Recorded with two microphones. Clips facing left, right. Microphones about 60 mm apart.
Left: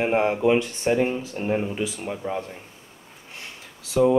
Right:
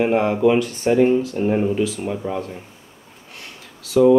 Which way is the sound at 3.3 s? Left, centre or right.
Left.